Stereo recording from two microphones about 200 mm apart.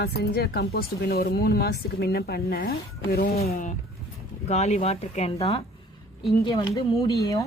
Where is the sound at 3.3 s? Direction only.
30° left (ahead or behind).